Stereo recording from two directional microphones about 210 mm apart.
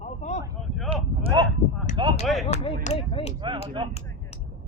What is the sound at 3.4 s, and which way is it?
Speech, 20° right (ahead or behind).